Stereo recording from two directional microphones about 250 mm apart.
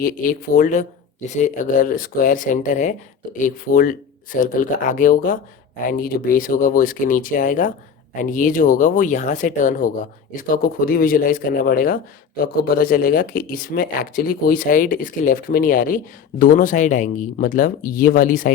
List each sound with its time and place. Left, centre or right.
0.0 s speech: left